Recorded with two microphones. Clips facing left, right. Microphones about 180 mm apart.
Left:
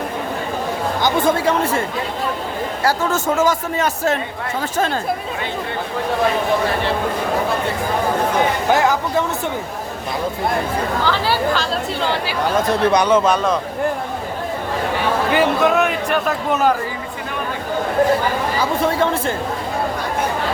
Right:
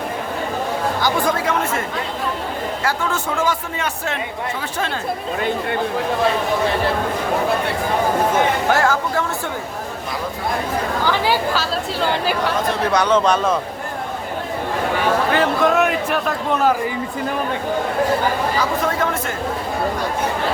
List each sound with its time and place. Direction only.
1.0 s speech: 25° left (ahead or behind)
2.8 s speech: 40° left (ahead or behind)
8.7 s speech: 15° left (ahead or behind)
11.0 s speech: 15° right (ahead or behind)
12.9 s speech: 15° left (ahead or behind)
15.3 s speech: 10° left (ahead or behind)
15.7 s speech: centre (ahead or behind)
18.6 s speech: 30° left (ahead or behind)